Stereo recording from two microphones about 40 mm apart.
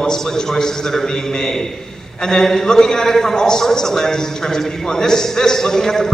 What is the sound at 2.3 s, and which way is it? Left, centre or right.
A man's voice, centre.